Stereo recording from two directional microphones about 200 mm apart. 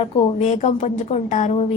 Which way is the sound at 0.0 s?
30° left (ahead or behind).